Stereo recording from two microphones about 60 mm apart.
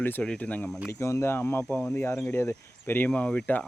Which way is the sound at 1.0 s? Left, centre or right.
Left.